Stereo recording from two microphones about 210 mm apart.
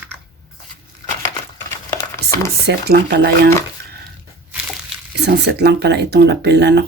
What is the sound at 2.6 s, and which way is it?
Speech, 50° right (ahead or behind).